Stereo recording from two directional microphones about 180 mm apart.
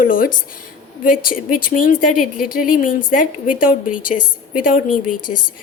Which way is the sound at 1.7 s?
50° left (ahead or behind).